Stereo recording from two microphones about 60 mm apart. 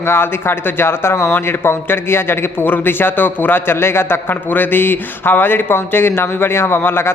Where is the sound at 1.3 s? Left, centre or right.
Left.